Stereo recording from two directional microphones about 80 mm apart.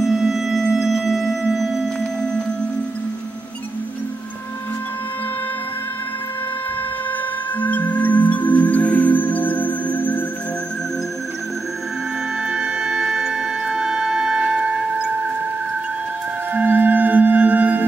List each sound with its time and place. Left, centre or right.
0.0 s music: centre
7.6 s music: left
12.4 s music: centre
16.5 s music: right